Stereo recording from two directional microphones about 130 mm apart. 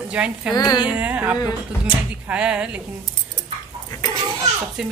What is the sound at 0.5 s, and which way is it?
Speech, 30° left (ahead or behind).